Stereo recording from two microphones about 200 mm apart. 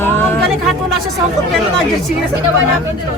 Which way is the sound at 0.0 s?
10° left (ahead or behind).